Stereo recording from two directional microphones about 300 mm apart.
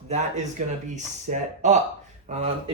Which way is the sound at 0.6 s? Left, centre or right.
Right.